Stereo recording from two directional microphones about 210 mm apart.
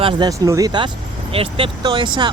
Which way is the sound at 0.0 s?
20° right (ahead or behind).